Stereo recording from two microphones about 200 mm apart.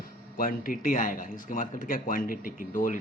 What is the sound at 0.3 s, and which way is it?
Speech, 45° left (ahead or behind).